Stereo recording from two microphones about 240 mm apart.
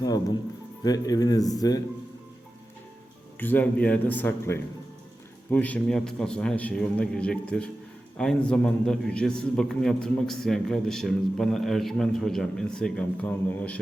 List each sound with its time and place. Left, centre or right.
0.0 s speech: centre
3.4 s a man's voice: centre